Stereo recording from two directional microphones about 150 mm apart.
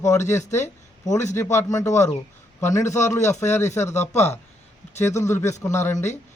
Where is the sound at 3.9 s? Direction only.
50° left (ahead or behind).